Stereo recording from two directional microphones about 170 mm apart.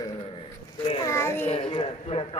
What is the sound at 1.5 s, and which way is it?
Speech, 35° left (ahead or behind).